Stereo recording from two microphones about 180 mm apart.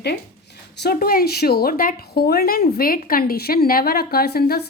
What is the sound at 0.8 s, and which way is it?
A woman's voice, 60° left (ahead or behind).